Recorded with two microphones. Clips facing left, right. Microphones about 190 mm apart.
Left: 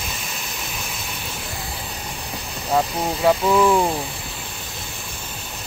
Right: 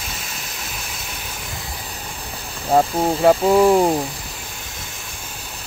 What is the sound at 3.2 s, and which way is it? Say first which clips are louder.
Speech: right 3 dB; 40° right (ahead or behind).